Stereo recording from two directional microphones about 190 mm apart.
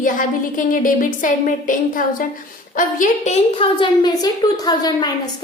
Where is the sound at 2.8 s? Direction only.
45° left (ahead or behind).